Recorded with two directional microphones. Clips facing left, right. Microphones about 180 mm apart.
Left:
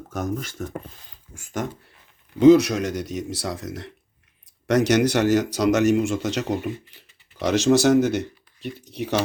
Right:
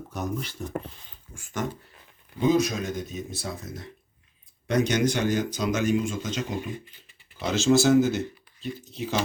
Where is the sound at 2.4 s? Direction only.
80° left.